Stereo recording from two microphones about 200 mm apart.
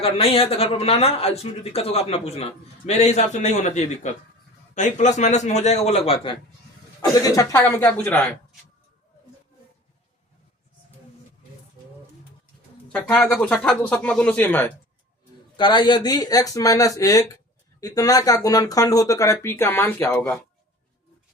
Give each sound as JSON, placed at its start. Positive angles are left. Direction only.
{"t": 0.0, "sound": "speech", "side_deg": 30}
{"t": 7.2, "sound": "speech", "side_deg": 15}
{"t": 12.9, "sound": "speech", "side_deg": 5}
{"t": 15.5, "sound": "speech", "side_deg": 25}